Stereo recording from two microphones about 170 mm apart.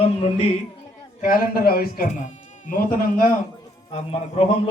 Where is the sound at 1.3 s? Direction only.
60° left (ahead or behind).